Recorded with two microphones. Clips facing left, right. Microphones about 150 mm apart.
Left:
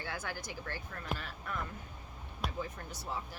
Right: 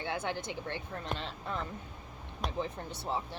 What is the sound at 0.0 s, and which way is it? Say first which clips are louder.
Speech: right 6 dB; 25° right (ahead or behind).